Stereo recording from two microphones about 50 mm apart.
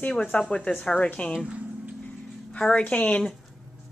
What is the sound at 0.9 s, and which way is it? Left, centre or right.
Speech, left.